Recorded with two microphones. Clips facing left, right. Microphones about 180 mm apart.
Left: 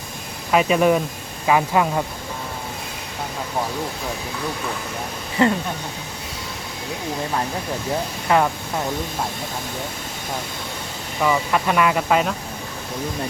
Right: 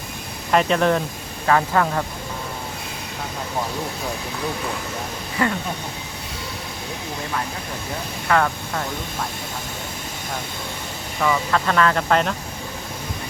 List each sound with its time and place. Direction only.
0.5 s speech: 5° left (ahead or behind)
5.4 s speech: 25° left (ahead or behind)
8.3 s speech: 15° left (ahead or behind)
11.2 s speech: 10° left (ahead or behind)